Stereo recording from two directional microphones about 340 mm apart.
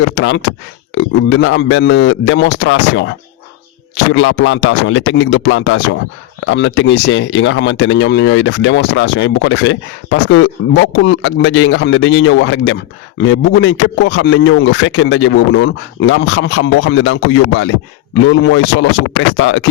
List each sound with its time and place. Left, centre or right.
0.2 s speech: left